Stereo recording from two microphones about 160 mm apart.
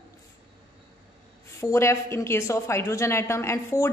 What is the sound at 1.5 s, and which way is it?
A woman's voice, 20° left (ahead or behind).